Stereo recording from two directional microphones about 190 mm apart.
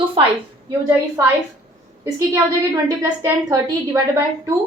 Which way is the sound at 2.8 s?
20° right (ahead or behind).